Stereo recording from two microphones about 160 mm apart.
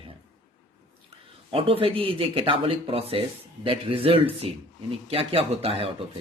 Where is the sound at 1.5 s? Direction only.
35° right (ahead or behind).